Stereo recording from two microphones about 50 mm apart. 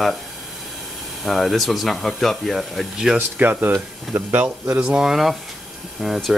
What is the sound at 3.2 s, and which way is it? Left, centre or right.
Speech, right.